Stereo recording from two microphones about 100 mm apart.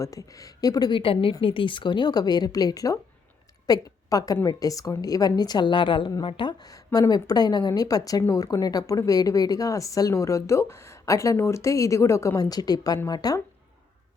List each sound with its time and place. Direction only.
0.0 s a woman's voice: 35° left (ahead or behind)
0.9 s a woman's voice: 65° left (ahead or behind); by 13.4 s 40° left (ahead or behind)